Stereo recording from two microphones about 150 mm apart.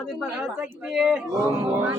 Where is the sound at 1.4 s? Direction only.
20° right (ahead or behind).